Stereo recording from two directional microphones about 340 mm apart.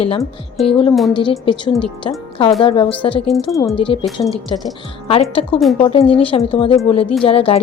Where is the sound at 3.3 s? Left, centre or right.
Centre.